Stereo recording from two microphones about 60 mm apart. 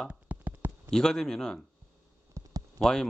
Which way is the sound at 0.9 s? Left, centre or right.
Centre.